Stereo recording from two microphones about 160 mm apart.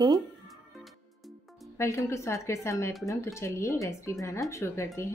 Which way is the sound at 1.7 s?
20° left (ahead or behind).